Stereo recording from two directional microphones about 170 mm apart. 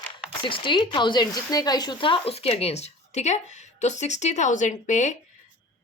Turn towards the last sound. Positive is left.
turn(degrees=45)  # may be behind; listen again after turning